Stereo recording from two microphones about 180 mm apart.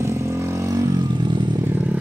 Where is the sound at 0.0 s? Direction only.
15° right (ahead or behind).